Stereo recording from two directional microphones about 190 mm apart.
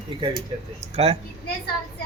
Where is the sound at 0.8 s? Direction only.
35° right (ahead or behind).